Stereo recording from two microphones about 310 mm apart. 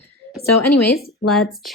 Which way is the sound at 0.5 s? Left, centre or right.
Left.